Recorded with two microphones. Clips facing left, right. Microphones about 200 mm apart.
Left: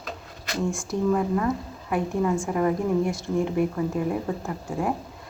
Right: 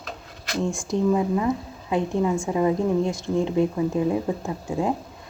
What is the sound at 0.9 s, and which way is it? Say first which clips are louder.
Speech: right 2 dB; 15° right (ahead or behind).